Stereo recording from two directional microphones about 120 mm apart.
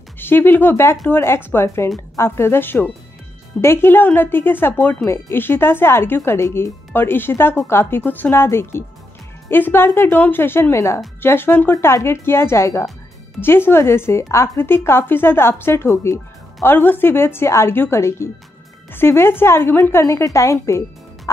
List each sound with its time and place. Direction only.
0.2 s speech: 20° left (ahead or behind)